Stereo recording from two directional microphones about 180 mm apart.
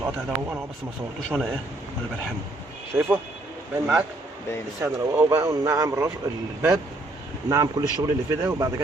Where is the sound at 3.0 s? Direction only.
10° right (ahead or behind).